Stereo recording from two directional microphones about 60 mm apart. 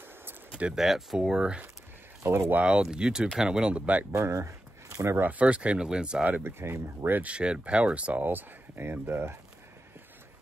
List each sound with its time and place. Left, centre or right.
0.7 s speech: centre; by 4.0 s right
4.1 s speech: right
5.2 s speech: right
6.4 s speech: right
7.2 s speech: centre; by 9.4 s right